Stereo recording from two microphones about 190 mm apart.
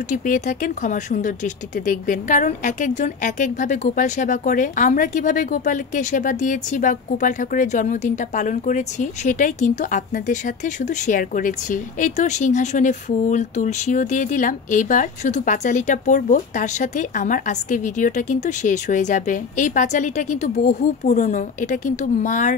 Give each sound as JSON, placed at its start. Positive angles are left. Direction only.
{"t": 0.1, "sound": "speech", "side_deg": 45}